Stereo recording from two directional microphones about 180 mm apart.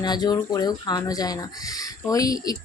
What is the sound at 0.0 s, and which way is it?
Speech, 20° left (ahead or behind).